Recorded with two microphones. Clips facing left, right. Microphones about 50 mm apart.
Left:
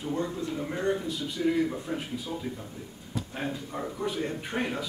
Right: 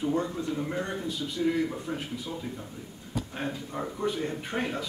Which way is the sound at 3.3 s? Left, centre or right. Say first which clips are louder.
Left 1 dB; centre.